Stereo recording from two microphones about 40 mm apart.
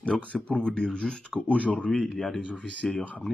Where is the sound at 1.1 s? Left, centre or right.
Left.